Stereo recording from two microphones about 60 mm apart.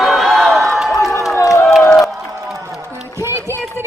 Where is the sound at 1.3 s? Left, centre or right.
Left.